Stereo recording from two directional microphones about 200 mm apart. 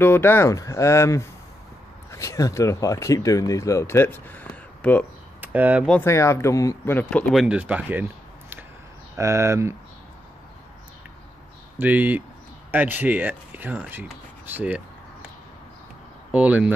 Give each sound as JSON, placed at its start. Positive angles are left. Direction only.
{"t": 0.0, "sound": "speech", "side_deg": 10}
{"t": 5.4, "sound": "speech", "side_deg": -10}
{"t": 5.9, "sound": "speech", "side_deg": 10}
{"t": 11.8, "sound": "speech", "side_deg": -10}
{"t": 16.3, "sound": "speech", "side_deg": -5}